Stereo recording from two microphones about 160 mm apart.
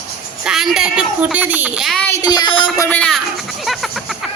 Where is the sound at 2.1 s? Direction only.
20° left (ahead or behind).